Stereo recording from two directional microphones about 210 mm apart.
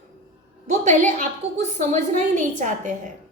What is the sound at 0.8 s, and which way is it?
Speech, 35° right (ahead or behind).